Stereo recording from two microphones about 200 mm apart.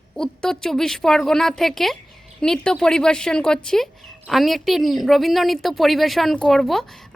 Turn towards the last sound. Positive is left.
turn(degrees=0)  # may be behind; listen again after turning